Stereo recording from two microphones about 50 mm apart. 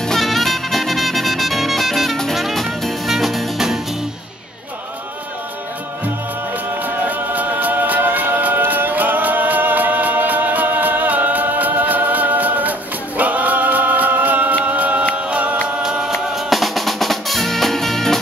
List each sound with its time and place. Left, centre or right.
0.0 s music: centre
7.1 s music: right
13.2 s a capella: right
15.1 s music: right
16.1 s drum: centre